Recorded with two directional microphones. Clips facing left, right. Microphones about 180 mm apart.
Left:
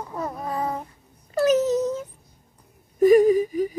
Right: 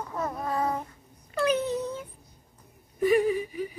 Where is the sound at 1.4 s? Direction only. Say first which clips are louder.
Left 7 dB; 40° left (ahead or behind).